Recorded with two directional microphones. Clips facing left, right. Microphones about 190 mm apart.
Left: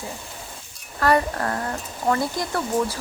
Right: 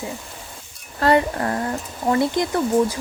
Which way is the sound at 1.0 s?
25° right (ahead or behind).